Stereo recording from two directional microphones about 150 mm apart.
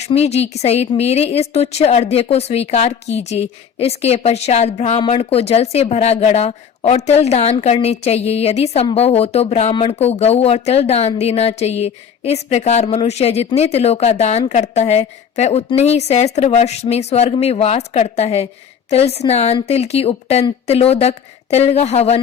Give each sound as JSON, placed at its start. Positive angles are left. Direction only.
{"t": 0.0, "sound": "a woman's voice", "side_deg": 45}